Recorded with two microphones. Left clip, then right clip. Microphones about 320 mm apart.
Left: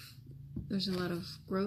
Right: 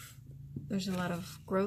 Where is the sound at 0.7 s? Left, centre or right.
Right.